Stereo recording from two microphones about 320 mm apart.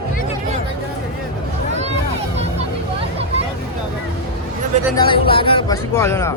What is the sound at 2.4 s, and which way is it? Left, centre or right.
Vehicle, centre.